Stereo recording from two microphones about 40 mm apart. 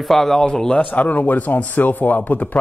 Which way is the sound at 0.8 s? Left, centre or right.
Left.